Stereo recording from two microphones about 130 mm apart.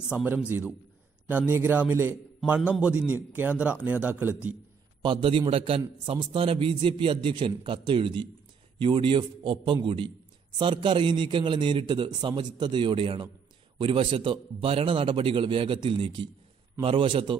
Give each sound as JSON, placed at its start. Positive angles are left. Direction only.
{"t": 0.5, "sound": "a man's voice", "side_deg": -15}
{"t": 5.0, "sound": "a man's voice", "side_deg": -40}